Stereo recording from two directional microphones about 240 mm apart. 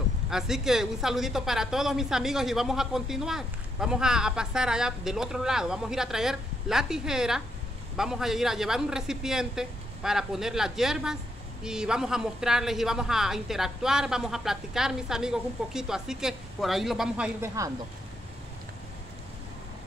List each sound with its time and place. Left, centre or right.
0.3 s a woman's voice: centre